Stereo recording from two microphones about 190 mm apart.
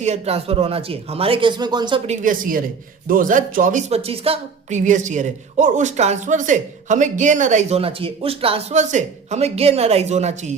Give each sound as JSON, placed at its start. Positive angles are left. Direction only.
{"t": 0.0, "sound": "speech", "side_deg": -35}
{"t": 2.0, "sound": "a woman's voice", "side_deg": -45}